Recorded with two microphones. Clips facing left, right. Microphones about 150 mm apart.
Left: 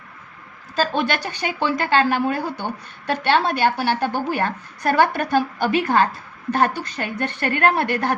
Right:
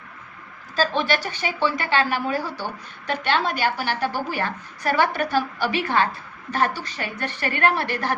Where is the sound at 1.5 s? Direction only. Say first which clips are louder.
Left 3 dB; 45° left (ahead or behind).